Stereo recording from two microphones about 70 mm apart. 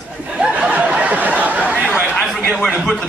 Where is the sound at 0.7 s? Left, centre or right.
Centre.